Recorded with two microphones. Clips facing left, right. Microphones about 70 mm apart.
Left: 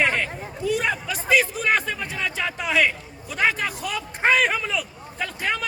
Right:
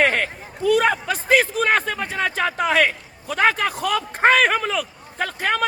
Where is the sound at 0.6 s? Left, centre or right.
Right.